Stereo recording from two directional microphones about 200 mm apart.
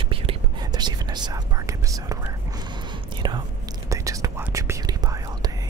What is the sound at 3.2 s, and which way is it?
Speech, 20° right (ahead or behind).